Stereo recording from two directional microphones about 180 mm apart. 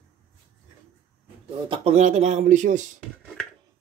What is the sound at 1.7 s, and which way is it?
Speech, 35° right (ahead or behind).